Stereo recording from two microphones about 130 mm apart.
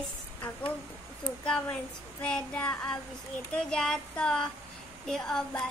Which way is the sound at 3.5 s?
5° left (ahead or behind).